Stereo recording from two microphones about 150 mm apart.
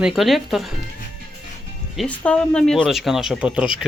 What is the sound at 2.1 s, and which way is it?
Speech, 10° left (ahead or behind).